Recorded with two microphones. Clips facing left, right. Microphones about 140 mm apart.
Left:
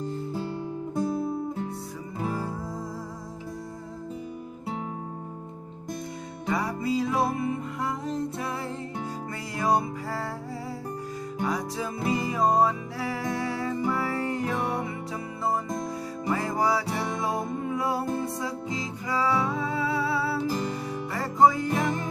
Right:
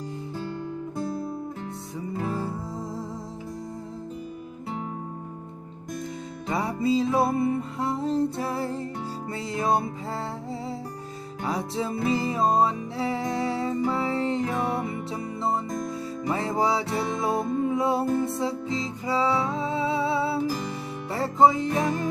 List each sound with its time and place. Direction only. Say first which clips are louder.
6.5 s music: right 3 dB; 25° right (ahead or behind)
9.6 s music: even; 25° right (ahead or behind)
11.4 s music: right 3 dB; 25° right (ahead or behind)
16.3 s music: right 1 dB; 25° right (ahead or behind)